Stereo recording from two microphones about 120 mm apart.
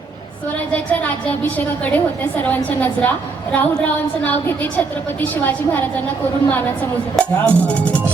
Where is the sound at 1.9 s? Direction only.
15° left (ahead or behind).